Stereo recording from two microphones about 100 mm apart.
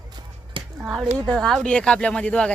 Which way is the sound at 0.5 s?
55° right (ahead or behind).